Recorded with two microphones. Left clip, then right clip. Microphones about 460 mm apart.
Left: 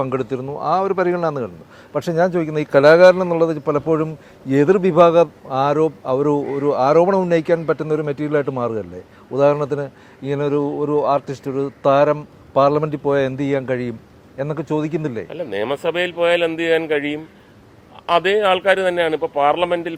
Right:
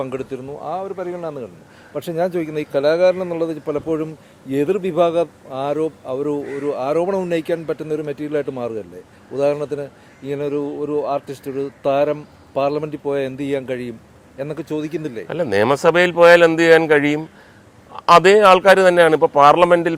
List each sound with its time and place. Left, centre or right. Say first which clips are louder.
0.0 s speech: left 4 dB; left
0.7 s a man's voice: left 8 dB; left
1.9 s speech: left 3 dB; left
15.3 s a man's voice: right 9 dB; right